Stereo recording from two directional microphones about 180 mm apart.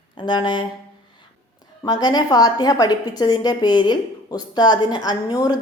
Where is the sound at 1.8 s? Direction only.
20° left (ahead or behind).